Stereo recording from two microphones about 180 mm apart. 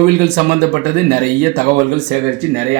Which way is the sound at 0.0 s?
55° right (ahead or behind).